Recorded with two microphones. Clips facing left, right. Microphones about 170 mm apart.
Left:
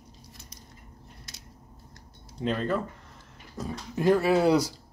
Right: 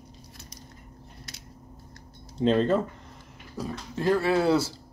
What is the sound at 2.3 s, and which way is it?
Speech, 25° right (ahead or behind).